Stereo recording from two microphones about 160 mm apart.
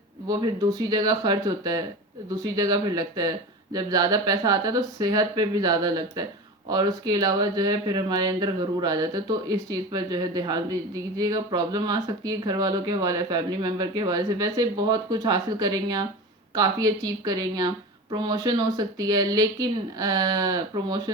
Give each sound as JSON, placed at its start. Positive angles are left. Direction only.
{"t": 0.3, "sound": "speech", "side_deg": -25}